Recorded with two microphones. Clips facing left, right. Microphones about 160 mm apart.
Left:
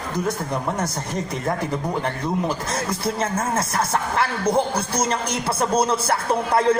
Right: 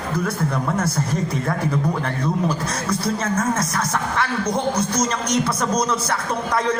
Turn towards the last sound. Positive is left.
turn(degrees=30)  # may be behind; listen again after turning